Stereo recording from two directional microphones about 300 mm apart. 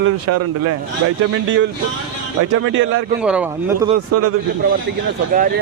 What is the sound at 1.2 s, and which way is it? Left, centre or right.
Speech, right.